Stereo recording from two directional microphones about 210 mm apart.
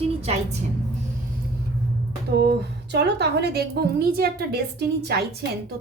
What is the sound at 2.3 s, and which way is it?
A woman's voice, 50° right (ahead or behind).